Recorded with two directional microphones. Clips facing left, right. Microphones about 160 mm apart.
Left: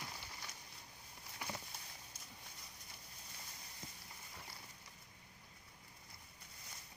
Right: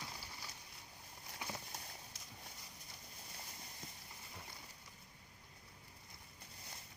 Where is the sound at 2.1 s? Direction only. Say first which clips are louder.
Right 1 dB; 90° right.